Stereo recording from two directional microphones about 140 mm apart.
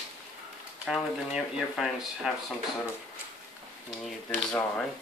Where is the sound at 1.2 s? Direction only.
5° right (ahead or behind).